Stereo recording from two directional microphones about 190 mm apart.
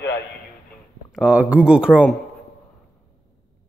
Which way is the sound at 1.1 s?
5° right (ahead or behind).